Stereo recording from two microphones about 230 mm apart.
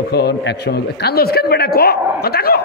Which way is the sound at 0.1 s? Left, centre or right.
Left.